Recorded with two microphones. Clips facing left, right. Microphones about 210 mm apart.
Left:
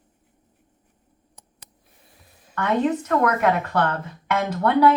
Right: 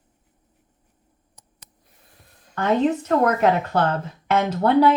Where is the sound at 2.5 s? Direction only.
30° right (ahead or behind).